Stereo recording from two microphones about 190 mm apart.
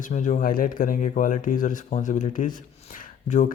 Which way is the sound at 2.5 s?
45° left (ahead or behind).